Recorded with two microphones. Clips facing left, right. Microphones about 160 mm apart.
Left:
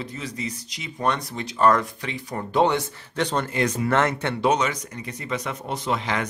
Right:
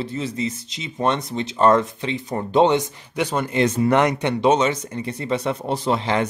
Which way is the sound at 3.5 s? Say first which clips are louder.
Right 7 dB; 25° right (ahead or behind).